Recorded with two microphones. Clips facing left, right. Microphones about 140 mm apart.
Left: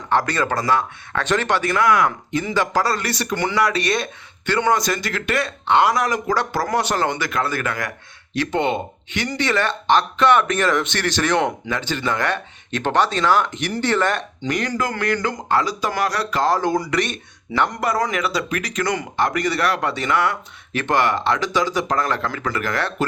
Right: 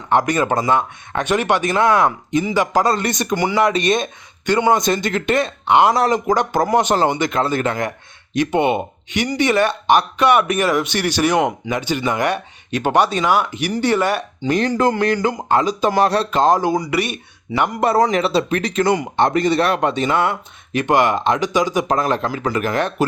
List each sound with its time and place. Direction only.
0.1 s speech: 15° right (ahead or behind)
2.4 s speech: 15° right (ahead or behind); by 6.1 s 30° right (ahead or behind)
6.1 s speech: 15° right (ahead or behind)
14.4 s speech: 20° right (ahead or behind)
16.7 s speech: 5° right (ahead or behind)
17.7 s speech: 30° right (ahead or behind)